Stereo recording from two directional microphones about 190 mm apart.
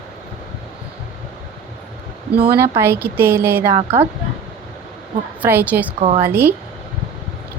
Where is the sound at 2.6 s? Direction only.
10° right (ahead or behind).